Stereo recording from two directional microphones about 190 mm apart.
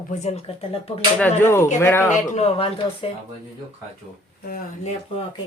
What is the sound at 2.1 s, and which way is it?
Speech, 35° left (ahead or behind).